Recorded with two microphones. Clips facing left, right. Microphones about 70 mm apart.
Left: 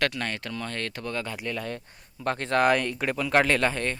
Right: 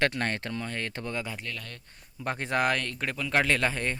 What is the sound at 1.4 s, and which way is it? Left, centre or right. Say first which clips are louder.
Speech: left 8 dB; left.